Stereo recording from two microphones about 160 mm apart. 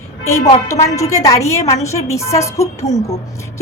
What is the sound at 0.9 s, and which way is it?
A woman's voice, 20° left (ahead or behind).